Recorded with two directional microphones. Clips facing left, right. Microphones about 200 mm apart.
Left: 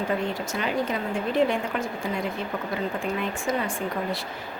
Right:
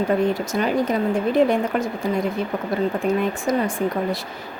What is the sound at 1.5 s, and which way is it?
Speech, 40° right (ahead or behind).